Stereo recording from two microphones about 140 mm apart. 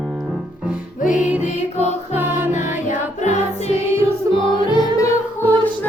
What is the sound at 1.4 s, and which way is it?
Music, 50° left (ahead or behind).